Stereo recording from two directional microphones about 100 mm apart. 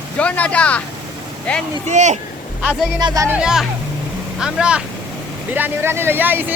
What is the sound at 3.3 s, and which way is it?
Speech, 10° right (ahead or behind).